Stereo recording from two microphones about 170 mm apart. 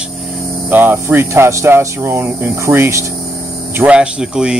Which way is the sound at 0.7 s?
10° right (ahead or behind).